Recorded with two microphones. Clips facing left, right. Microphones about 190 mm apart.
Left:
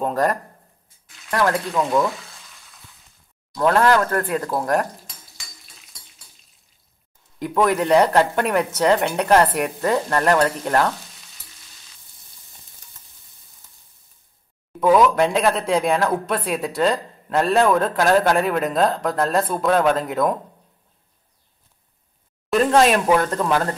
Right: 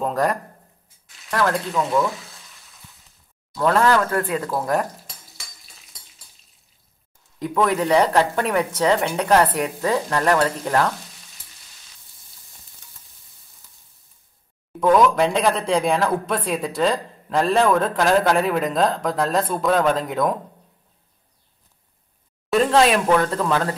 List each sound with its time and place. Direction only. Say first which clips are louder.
0.0 s speech: left 1 dB; centre (ahead or behind)
1.5 s speech: left 1 dB; centre (ahead or behind)
3.5 s speech: left 1 dB; centre (ahead or behind)
7.6 s speech: left 2 dB; centre (ahead or behind)
14.8 s speech: left 1 dB; 5° left (ahead or behind)
22.5 s speech: left 1 dB; centre (ahead or behind)